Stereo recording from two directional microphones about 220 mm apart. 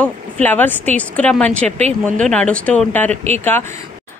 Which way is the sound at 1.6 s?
30° right (ahead or behind).